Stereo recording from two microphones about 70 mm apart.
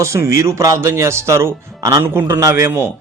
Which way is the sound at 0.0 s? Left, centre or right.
Right.